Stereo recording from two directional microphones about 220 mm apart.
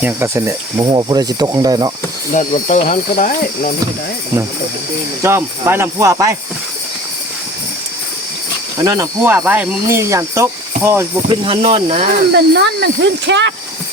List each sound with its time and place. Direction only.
0.0 s speech: 10° right (ahead or behind)
2.3 s speech: 35° left (ahead or behind)
5.2 s speech: 10° right (ahead or behind)
8.8 s speech: 15° right (ahead or behind)
11.3 s speech: 25° right (ahead or behind)
12.3 s speech: 50° right (ahead or behind)